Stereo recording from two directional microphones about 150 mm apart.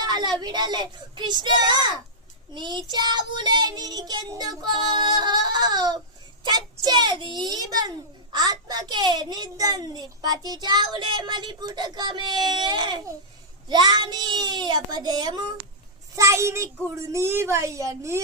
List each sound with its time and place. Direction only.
0.0 s a child's voice: 30° right (ahead or behind)